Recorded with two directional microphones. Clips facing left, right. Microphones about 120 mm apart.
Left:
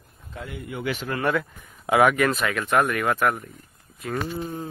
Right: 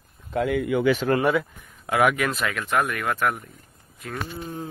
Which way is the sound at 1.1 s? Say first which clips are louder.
Right 8 dB; 55° right (ahead or behind).